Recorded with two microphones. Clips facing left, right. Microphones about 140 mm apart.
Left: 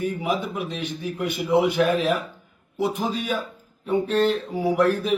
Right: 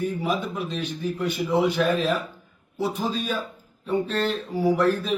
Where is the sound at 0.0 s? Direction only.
15° left (ahead or behind).